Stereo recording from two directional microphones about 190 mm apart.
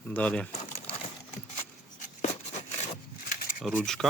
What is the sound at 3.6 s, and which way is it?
Speech, centre (ahead or behind).